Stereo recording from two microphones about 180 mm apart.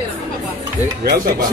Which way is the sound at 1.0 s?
60° right (ahead or behind).